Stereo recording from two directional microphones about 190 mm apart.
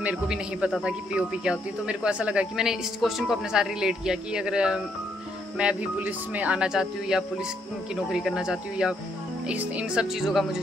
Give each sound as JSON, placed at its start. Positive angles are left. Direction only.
{"t": 0.0, "sound": "speech", "side_deg": -5}